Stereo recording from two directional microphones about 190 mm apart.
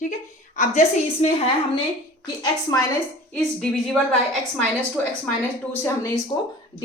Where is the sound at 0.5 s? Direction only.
40° left (ahead or behind).